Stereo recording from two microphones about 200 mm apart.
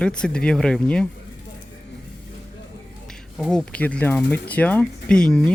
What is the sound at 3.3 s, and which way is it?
Speech, centre (ahead or behind).